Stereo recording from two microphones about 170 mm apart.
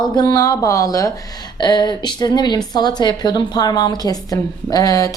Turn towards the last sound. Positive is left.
turn(degrees=20)  # may be behind; listen again after turning